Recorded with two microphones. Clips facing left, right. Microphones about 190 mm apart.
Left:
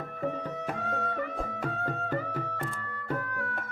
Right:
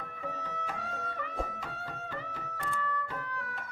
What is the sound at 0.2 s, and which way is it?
Music, 55° left (ahead or behind).